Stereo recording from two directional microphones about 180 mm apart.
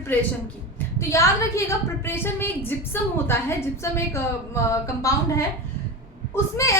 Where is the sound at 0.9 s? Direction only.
15° left (ahead or behind).